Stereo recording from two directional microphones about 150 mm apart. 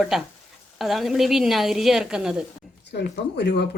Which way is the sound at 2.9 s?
90° left.